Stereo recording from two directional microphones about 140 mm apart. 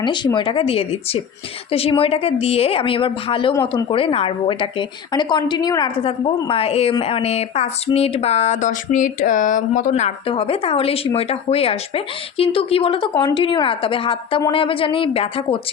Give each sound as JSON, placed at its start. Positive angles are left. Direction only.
{"t": 0.0, "sound": "speech", "side_deg": 35}
{"t": 6.0, "sound": "speech", "side_deg": 40}